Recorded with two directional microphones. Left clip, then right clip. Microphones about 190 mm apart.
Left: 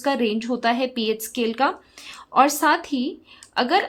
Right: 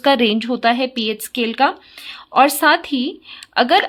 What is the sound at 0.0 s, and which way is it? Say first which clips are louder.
A woman's voice: right 8 dB; 25° right (ahead or behind).